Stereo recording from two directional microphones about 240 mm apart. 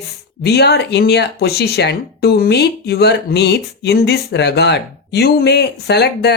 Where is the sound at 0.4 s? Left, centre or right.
Left.